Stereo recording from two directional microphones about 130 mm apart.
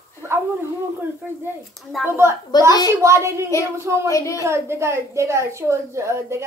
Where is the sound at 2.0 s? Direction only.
20° right (ahead or behind).